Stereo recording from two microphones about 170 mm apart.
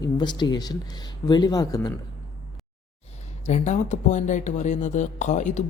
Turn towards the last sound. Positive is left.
turn(degrees=45)  # may be behind; listen again after turning